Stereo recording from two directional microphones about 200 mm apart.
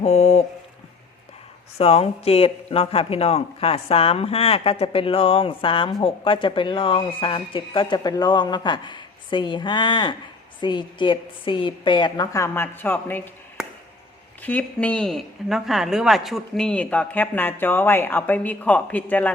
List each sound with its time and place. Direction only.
0.0 s speech: 30° left (ahead or behind)
1.8 s speech: 30° left (ahead or behind); by 13.3 s 10° left (ahead or behind)
13.6 s chop: 5° right (ahead or behind)
14.4 s speech: 5° left (ahead or behind)